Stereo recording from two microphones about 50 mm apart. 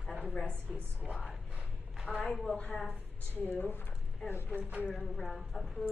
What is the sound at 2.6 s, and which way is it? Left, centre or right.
Speech, centre.